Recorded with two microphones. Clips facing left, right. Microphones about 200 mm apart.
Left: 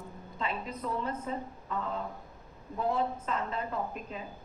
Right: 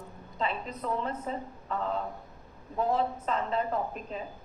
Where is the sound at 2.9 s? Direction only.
35° right (ahead or behind).